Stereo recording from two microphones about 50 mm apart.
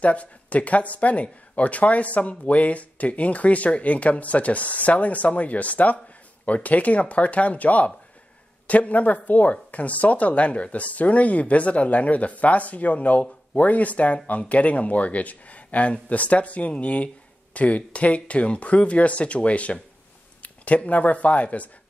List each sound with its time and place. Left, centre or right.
0.0 s speech: left